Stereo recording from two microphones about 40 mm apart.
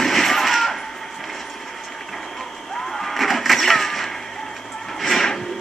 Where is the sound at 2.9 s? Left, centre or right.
Centre.